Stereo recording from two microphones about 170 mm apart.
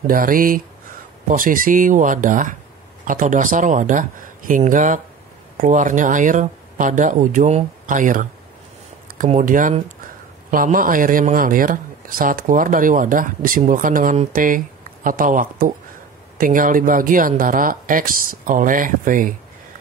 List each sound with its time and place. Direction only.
0.0 s speech: 55° right (ahead or behind)